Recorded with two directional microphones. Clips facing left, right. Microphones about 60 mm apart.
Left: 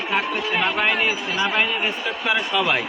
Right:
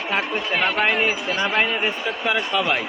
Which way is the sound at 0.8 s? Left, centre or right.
Centre.